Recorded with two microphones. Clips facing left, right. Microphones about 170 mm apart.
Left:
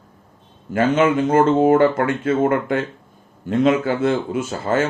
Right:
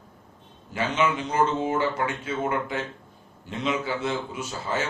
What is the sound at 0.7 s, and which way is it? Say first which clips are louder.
Speech: left 9 dB; 50° left (ahead or behind).